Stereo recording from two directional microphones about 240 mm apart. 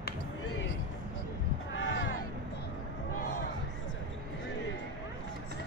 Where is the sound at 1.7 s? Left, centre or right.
Left.